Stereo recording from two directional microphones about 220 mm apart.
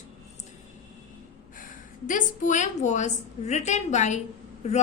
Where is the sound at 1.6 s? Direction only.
35° left (ahead or behind).